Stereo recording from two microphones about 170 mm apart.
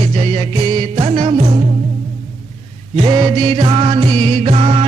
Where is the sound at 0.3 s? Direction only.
30° right (ahead or behind).